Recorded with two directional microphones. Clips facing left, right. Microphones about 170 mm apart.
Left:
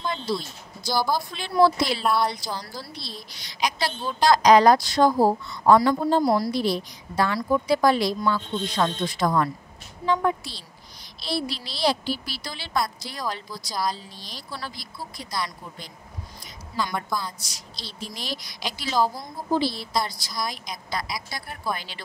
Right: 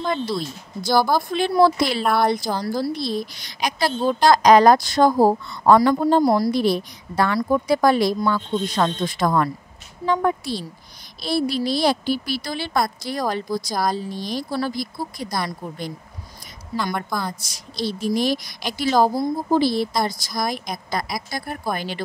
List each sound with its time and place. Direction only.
0.8 s speech: 55° right (ahead or behind)
6.2 s a woman's voice: 40° right (ahead or behind)
6.5 s speech: 55° right (ahead or behind)